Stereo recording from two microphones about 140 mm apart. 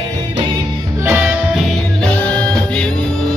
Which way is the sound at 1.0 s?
15° right (ahead or behind).